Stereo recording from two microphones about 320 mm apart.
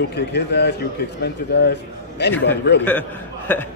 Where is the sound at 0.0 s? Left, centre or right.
Left.